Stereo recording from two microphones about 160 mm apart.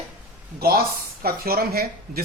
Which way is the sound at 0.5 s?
75° right (ahead or behind).